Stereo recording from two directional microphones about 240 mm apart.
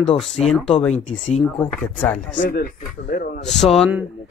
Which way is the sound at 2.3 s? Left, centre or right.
Left.